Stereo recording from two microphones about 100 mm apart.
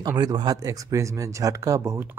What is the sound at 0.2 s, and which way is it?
Speech, 40° right (ahead or behind).